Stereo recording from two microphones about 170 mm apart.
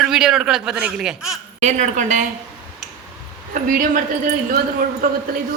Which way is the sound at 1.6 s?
45° right (ahead or behind).